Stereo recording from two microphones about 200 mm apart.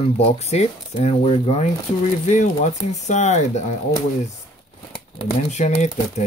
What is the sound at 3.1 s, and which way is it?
Speech, 35° left (ahead or behind).